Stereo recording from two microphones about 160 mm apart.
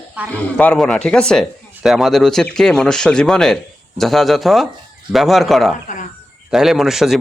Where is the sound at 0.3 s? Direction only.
10° left (ahead or behind).